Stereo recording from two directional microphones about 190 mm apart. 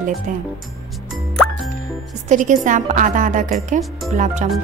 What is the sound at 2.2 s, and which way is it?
Speech, 40° right (ahead or behind).